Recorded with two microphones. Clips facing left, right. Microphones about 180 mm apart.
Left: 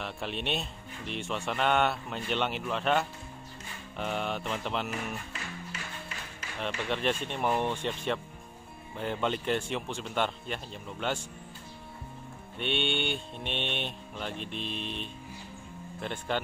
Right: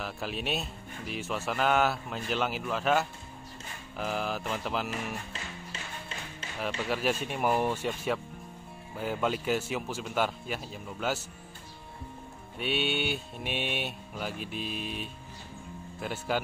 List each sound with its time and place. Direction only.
0.0 s a man's voice: centre (ahead or behind)
5.3 s music: 30° right (ahead or behind)
6.9 s a man's voice: 5° right (ahead or behind)
12.5 s a man's voice: 5° right (ahead or behind)